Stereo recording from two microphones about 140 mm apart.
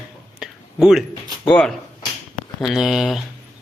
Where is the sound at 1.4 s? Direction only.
5° left (ahead or behind).